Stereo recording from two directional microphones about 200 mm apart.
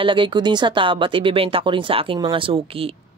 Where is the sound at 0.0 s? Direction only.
25° right (ahead or behind).